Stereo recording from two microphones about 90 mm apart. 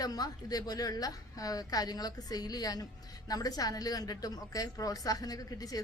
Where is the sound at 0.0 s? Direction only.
45° left (ahead or behind).